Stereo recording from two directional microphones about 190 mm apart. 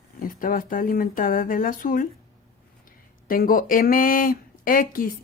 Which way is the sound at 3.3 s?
50° left (ahead or behind).